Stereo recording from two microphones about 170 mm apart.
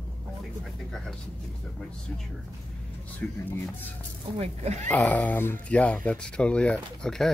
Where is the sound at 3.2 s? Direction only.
5° left (ahead or behind).